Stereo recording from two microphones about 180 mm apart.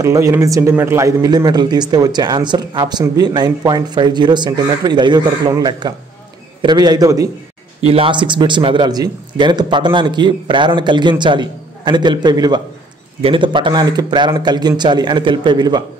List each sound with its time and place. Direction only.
0.0 s speech: 15° right (ahead or behind)
7.8 s speech: 30° right (ahead or behind)